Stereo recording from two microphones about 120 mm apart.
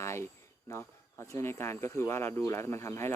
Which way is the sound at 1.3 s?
20° left (ahead or behind).